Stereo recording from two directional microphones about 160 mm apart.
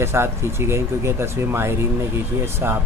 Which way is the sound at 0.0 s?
15° right (ahead or behind).